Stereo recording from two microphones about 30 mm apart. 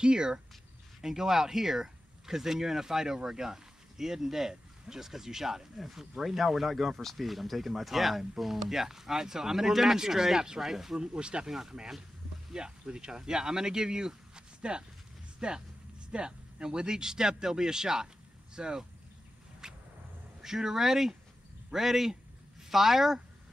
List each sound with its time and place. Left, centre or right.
0.0 s speech: right
1.0 s speech: centre
11.0 s speech: right
11.4 s speech: centre
12.5 s speech: right
19.6 s a sound: right
20.4 s speech: centre